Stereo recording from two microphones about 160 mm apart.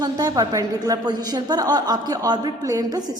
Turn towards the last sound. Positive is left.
turn(degrees=-25)  # may be behind; listen again after turning